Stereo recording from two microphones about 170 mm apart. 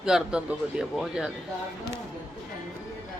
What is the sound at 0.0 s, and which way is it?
Speech, 5° right (ahead or behind).